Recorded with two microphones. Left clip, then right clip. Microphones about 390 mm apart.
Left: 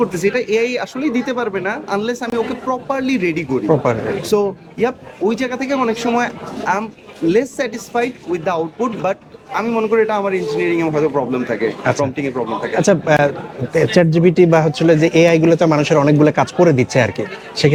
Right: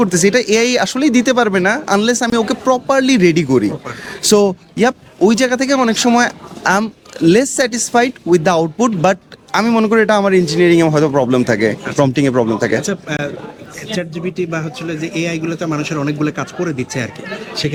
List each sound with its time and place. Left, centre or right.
0.0 s a woman's voice: right
12.8 s speech: left